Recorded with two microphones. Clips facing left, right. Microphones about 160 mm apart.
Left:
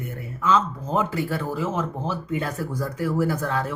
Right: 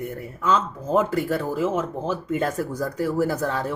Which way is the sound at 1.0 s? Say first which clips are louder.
Right 3 dB; 45° right (ahead or behind).